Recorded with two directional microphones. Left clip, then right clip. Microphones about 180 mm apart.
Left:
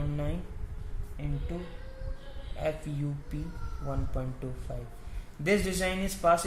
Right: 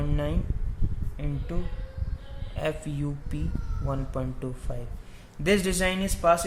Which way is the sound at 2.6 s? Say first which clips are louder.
Right 3 dB; 35° right (ahead or behind).